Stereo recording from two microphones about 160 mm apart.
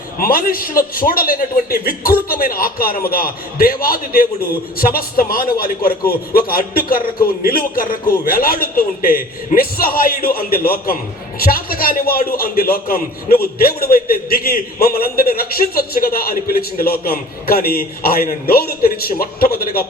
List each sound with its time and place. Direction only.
0.2 s a man's voice: 65° left (ahead or behind)